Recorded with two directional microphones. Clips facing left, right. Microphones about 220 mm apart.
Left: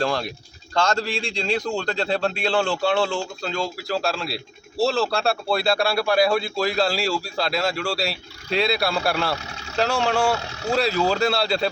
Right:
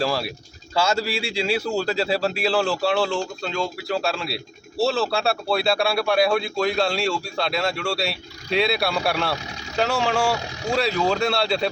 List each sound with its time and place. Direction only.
0.0 s speech: 5° right (ahead or behind)
10.3 s speech: 15° right (ahead or behind)
10.7 s speech: centre (ahead or behind)